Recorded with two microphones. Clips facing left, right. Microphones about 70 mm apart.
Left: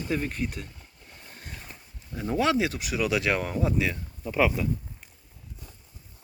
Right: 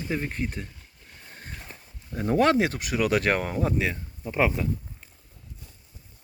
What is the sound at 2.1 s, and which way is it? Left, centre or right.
Speech, right.